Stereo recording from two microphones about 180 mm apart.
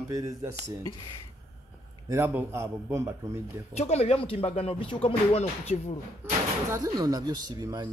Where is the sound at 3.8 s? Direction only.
35° left (ahead or behind).